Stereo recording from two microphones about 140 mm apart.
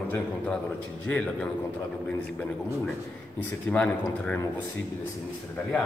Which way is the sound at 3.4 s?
10° left (ahead or behind).